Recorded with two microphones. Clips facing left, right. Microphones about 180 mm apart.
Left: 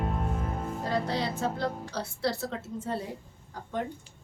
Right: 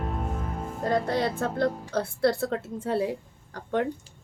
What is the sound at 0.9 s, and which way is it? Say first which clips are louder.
Music: right 5 dB; 50° right (ahead or behind).